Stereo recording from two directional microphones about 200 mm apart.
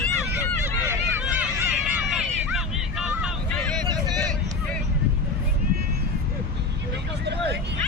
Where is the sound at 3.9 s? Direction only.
20° right (ahead or behind).